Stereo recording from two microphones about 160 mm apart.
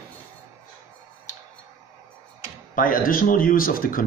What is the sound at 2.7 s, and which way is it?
Speech, 60° left (ahead or behind).